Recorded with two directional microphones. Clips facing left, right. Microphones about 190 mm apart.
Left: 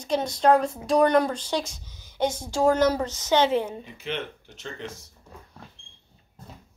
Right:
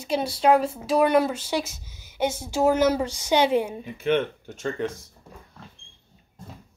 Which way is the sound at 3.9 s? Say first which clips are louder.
Right 9 dB; 55° right (ahead or behind).